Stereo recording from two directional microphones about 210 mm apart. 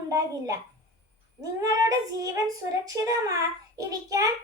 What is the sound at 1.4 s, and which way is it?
A child's voice, 15° right (ahead or behind).